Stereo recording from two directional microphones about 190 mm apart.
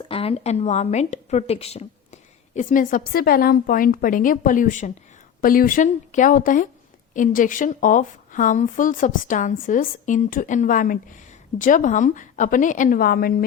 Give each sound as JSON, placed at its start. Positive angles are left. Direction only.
{"t": 0.1, "sound": "a woman's voice", "side_deg": 30}
{"t": 2.6, "sound": "a woman's voice", "side_deg": 45}